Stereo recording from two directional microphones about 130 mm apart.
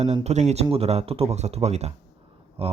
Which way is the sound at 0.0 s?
55° right (ahead or behind).